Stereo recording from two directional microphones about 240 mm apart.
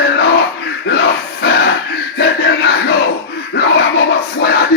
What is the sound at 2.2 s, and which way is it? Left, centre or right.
Crowd, left.